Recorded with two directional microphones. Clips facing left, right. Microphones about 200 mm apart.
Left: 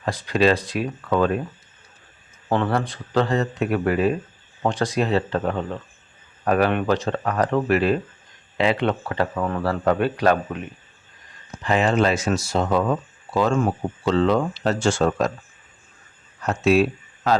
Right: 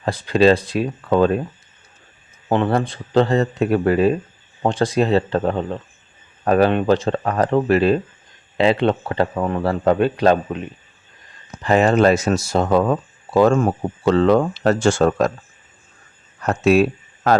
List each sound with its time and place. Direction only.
0.0 s speech: 30° right (ahead or behind)
2.5 s speech: 25° right (ahead or behind)
11.6 s speech: 45° right (ahead or behind)
16.4 s speech: 50° right (ahead or behind)